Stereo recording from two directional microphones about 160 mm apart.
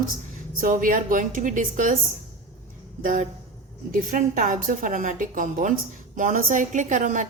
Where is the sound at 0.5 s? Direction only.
55° right (ahead or behind).